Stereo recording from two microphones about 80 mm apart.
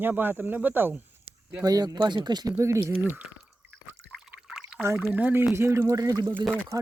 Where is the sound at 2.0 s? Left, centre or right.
Right.